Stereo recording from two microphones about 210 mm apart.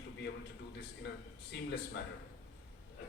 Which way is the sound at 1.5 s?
55° left (ahead or behind).